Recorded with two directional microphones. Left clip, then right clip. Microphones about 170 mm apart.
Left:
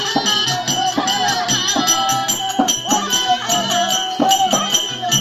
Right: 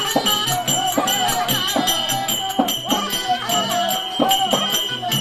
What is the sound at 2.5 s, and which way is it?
Music, 10° right (ahead or behind).